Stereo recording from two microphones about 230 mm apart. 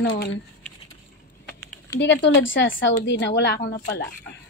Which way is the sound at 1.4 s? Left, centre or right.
Centre.